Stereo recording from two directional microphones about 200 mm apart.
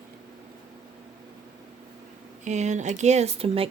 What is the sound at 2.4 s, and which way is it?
Speech, 35° right (ahead or behind).